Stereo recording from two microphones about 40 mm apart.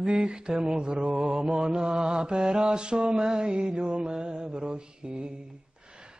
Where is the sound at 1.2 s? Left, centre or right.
Centre.